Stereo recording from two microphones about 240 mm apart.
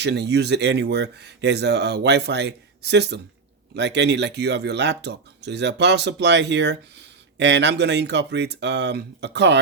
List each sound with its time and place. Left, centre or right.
0.0 s speech: right